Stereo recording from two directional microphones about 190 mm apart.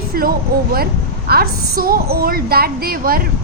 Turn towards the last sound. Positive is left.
turn(degrees=-50)  # may be behind; listen again after turning